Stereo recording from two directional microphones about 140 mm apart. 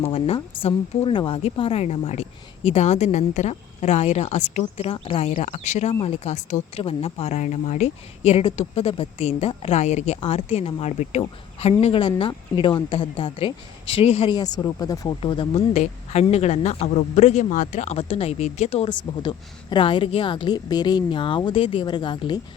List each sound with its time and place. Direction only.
0.0 s speech: 45° left (ahead or behind)
4.9 s speech: 45° left (ahead or behind)
6.8 s a woman's voice: 45° left (ahead or behind)
14.3 s speech: 30° left (ahead or behind)
15.2 s speech: 40° left (ahead or behind)
18.9 s a woman's voice: 30° left (ahead or behind)